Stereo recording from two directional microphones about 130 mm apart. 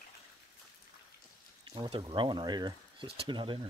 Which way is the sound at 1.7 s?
40° right (ahead or behind).